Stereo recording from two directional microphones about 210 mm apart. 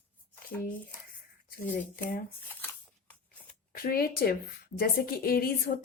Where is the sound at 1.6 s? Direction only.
40° left (ahead or behind).